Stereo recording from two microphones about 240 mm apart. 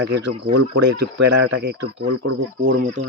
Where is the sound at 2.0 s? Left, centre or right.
Right.